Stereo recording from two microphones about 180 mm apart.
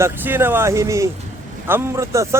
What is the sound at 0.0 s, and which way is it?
A man's voice, 10° right (ahead or behind).